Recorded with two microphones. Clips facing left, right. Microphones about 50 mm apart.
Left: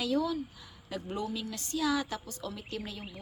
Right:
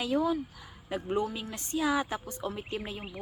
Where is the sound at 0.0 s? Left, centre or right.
Right.